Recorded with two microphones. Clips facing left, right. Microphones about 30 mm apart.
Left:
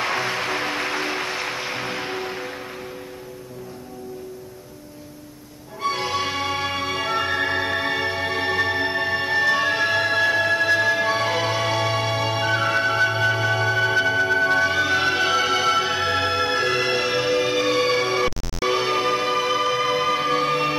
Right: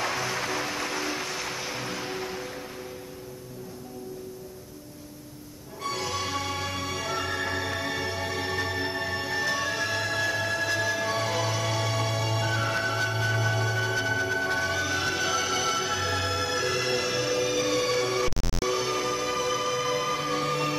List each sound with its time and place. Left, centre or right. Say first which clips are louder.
0.0 s music: left 5 dB; left
5.8 s music: left 7 dB; left